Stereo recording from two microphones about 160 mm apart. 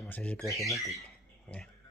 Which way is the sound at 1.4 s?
5° left (ahead or behind).